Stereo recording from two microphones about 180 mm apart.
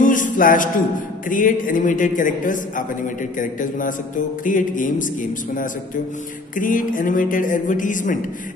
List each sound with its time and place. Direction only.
0.0 s music: 45° left (ahead or behind)
1.3 s speech: 45° left (ahead or behind)
6.5 s speech: 50° left (ahead or behind)